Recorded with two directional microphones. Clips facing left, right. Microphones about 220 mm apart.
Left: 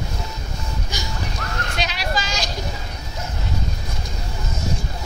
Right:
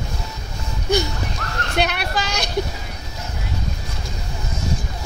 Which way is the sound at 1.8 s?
60° right (ahead or behind).